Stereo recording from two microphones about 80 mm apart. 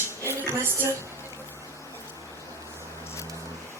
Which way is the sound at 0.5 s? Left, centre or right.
Right.